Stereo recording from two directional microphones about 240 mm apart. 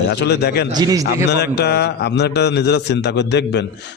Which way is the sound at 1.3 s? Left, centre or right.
Left.